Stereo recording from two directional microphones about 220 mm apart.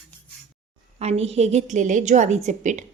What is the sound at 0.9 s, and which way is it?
A woman's voice, 30° right (ahead or behind).